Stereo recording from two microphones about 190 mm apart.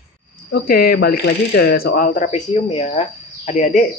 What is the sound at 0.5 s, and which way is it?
Speech, 50° left (ahead or behind).